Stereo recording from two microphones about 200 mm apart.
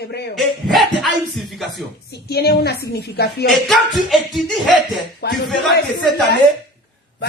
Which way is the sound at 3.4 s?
Centre (ahead or behind).